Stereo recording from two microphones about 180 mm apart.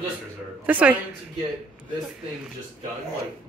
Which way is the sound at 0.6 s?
10° right (ahead or behind).